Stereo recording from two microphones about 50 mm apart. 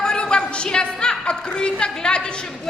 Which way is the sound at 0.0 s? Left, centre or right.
Centre.